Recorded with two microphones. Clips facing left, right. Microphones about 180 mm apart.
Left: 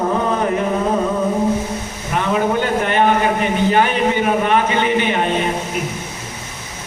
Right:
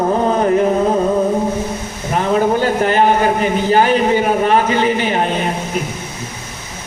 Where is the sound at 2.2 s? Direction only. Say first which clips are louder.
Right 3 dB; 35° right (ahead or behind).